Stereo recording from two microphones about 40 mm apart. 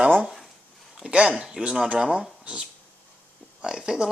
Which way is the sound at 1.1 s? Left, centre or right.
Right.